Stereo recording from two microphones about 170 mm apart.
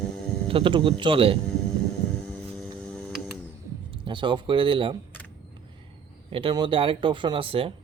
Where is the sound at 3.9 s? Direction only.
30° right (ahead or behind).